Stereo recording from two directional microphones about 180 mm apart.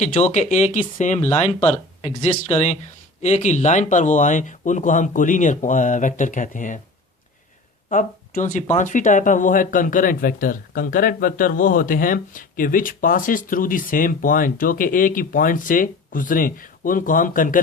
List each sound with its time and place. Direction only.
0.0 s speech: 40° left (ahead or behind)
7.9 s speech: 45° left (ahead or behind)